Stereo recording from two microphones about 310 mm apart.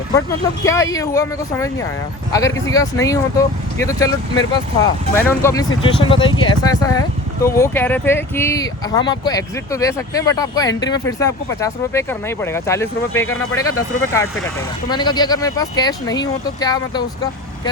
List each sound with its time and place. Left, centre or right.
0.6 s speech: centre
14.8 s speech: centre